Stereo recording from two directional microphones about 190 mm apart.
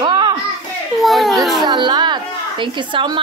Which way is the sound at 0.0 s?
25° right (ahead or behind).